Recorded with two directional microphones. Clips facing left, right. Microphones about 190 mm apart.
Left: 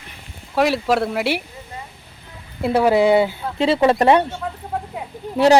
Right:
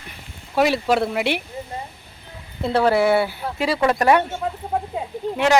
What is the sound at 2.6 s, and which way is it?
Speech, 10° left (ahead or behind).